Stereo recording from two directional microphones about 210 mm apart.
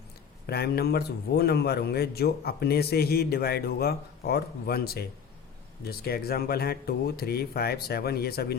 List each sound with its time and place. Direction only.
0.4 s a man's voice: 50° left (ahead or behind)